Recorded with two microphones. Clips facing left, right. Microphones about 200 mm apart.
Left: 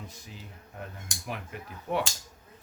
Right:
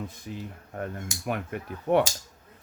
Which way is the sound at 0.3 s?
55° right (ahead or behind).